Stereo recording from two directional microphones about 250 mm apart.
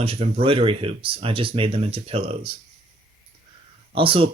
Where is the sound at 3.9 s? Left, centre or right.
Right.